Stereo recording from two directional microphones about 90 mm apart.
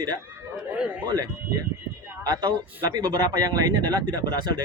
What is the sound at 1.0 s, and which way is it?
Speech, 50° right (ahead or behind).